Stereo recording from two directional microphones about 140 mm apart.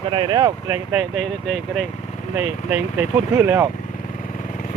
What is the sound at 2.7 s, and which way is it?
Speech, 15° right (ahead or behind).